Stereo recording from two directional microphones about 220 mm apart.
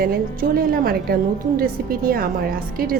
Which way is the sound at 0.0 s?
40° right (ahead or behind).